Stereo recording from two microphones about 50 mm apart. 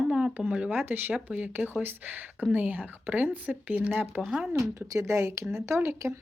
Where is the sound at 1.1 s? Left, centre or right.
Right.